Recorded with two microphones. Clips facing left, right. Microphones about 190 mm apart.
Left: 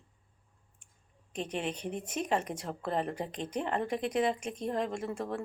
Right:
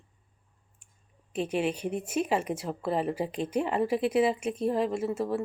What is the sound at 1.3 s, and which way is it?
Speech, 5° right (ahead or behind).